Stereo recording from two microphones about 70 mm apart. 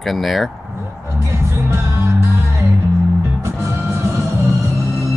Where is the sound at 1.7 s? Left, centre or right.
Right.